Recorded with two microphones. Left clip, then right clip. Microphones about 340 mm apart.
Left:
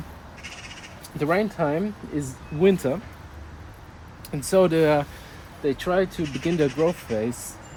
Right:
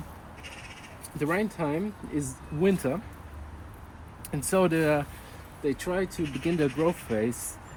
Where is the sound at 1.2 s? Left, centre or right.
Centre.